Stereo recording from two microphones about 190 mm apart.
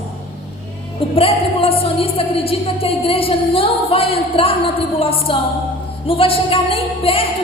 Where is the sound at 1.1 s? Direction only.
30° left (ahead or behind).